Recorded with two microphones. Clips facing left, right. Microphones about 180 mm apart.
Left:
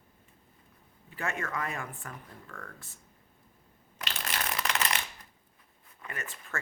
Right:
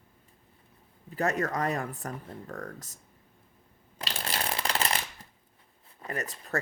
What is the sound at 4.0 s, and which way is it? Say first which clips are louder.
Shuffling cards: right 2 dB; 30° right (ahead or behind).